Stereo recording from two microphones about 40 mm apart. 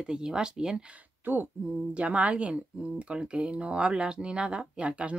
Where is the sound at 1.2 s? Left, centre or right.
Right.